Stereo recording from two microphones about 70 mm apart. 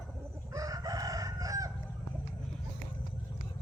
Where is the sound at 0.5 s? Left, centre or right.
Right.